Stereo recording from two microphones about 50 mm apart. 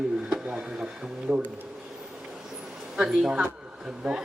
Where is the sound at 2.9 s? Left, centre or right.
Centre.